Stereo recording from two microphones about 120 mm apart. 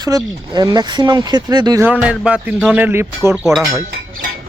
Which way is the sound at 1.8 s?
10° right (ahead or behind).